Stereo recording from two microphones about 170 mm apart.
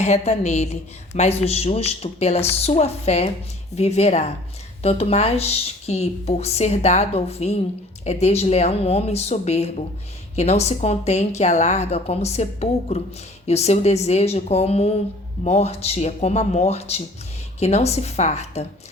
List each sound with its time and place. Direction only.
0.0 s a woman's voice: 40° left (ahead or behind)